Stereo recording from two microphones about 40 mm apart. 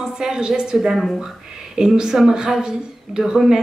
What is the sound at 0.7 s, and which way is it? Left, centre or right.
Speech, centre.